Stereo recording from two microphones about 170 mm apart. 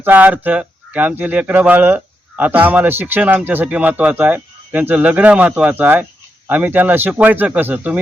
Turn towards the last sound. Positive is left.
turn(degrees=-10)  # may be behind; listen again after turning